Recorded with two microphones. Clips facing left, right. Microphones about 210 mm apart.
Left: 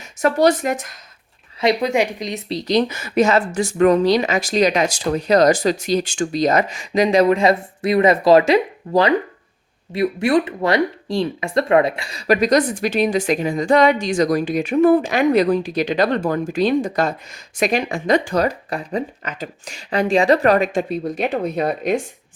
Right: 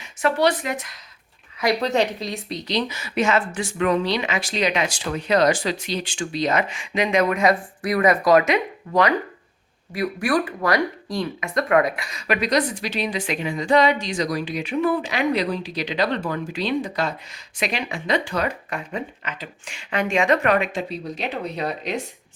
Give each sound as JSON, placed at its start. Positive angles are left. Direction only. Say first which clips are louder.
{"t": 0.2, "sound": "speech", "louder": "left 5 dB", "side_deg": 40}
{"t": 1.8, "sound": "a woman's voice", "louder": "left 2 dB", "side_deg": 10}
{"t": 2.5, "sound": "speech", "louder": "left 8 dB", "side_deg": 40}